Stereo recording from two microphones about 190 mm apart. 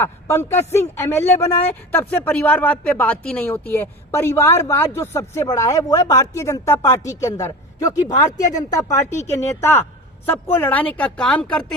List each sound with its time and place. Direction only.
0.0 s speech: 15° left (ahead or behind)